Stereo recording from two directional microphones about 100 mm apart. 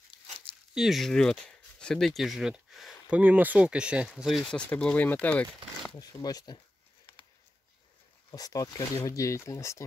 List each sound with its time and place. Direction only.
0.7 s speech: centre (ahead or behind)
3.1 s speech: 15° right (ahead or behind); by 4.6 s 5° left (ahead or behind)
4.6 s speech: 15° left (ahead or behind)
5.9 s speech: 40° left (ahead or behind)
8.3 s speech: 40° left (ahead or behind)